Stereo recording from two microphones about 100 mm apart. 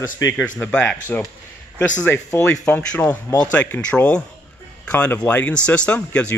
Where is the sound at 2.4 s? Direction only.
10° left (ahead or behind).